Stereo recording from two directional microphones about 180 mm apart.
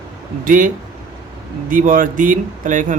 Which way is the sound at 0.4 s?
50° right (ahead or behind).